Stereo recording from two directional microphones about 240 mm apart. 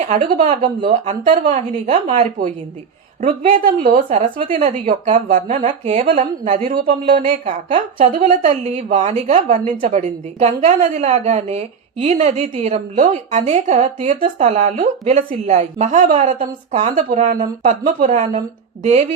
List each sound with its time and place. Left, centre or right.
0.1 s a woman's voice: right
4.1 s a woman's voice: right